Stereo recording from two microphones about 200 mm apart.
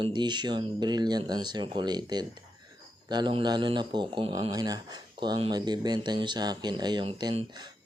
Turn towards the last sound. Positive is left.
turn(degrees=-20)  # may be behind; listen again after turning